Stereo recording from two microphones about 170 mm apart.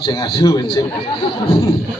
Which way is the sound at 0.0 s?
30° left (ahead or behind).